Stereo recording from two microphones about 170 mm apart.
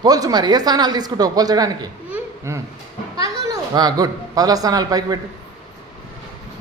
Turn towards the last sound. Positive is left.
turn(degrees=-20)  # may be behind; listen again after turning